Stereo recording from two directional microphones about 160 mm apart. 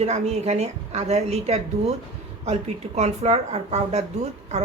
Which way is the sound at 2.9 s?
45° right (ahead or behind).